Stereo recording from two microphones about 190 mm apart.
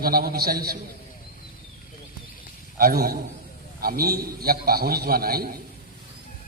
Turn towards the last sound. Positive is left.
turn(degrees=-50)  # may be behind; listen again after turning